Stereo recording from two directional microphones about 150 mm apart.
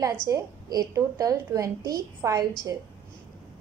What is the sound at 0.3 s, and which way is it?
A woman's voice, 25° right (ahead or behind).